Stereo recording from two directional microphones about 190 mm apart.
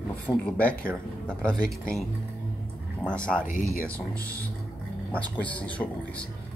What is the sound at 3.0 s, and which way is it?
Speech, 5° left (ahead or behind).